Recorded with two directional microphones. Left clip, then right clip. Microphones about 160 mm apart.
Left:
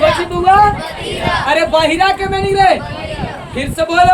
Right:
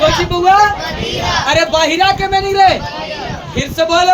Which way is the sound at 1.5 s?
Centre (ahead or behind).